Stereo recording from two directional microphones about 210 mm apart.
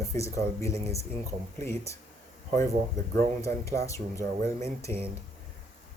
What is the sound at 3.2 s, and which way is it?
Speech, 30° right (ahead or behind).